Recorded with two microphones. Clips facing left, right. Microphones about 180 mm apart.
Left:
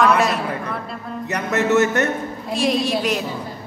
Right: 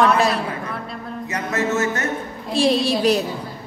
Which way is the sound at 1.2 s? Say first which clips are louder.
Left 3 dB; 70° left (ahead or behind).